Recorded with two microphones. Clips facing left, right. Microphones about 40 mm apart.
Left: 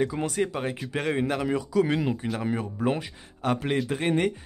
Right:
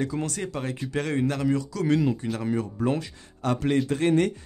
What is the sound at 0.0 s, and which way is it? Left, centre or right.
Speech, centre.